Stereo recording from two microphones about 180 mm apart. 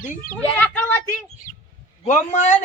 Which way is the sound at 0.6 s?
10° left (ahead or behind).